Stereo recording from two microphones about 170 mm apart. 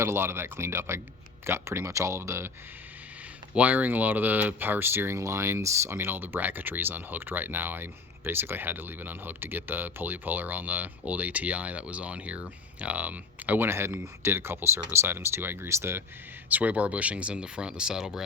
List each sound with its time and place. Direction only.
0.0 s speech: 15° right (ahead or behind)
3.5 s speech: 10° right (ahead or behind)